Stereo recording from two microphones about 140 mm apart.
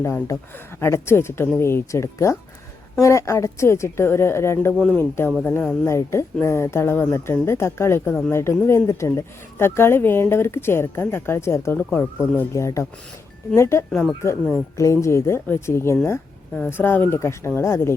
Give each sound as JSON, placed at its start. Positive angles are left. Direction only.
{"t": 0.0, "sound": "speech", "side_deg": 20}